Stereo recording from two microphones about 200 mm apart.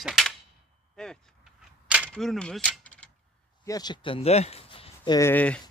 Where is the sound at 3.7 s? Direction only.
20° left (ahead or behind).